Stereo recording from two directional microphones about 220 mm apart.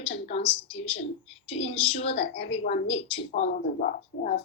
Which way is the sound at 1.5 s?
30° left (ahead or behind).